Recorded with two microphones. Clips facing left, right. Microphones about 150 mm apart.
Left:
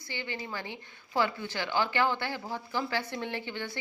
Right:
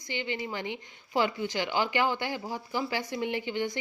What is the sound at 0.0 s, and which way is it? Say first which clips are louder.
A woman's voice: right 4 dB; 20° right (ahead or behind).